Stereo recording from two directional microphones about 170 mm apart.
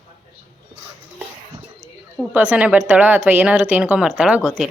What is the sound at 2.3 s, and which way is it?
Speech, 10° right (ahead or behind).